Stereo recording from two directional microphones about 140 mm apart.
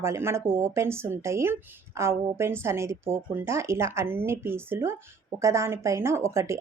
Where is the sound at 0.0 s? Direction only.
20° right (ahead or behind).